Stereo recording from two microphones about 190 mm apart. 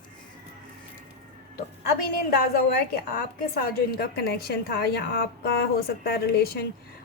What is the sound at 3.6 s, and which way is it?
A woman's voice, 50° left (ahead or behind).